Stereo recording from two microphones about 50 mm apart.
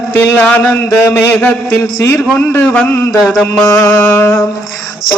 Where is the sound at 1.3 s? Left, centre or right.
Left.